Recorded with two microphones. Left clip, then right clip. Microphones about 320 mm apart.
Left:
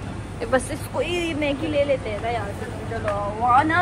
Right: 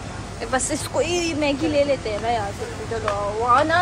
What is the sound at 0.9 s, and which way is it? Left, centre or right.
Speech, centre.